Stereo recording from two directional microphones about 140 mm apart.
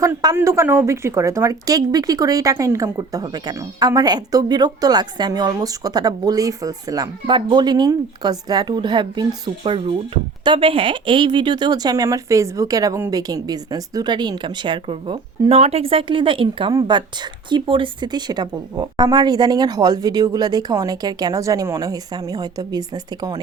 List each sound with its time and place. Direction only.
0.0 s a woman's voice: 25° right (ahead or behind)